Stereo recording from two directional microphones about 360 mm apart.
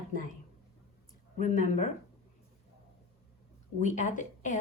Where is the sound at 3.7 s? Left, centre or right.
Centre.